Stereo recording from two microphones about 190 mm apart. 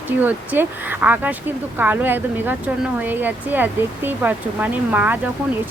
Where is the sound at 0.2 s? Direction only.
10° right (ahead or behind).